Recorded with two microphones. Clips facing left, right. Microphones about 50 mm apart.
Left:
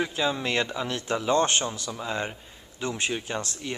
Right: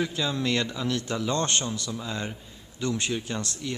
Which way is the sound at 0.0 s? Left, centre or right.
Left.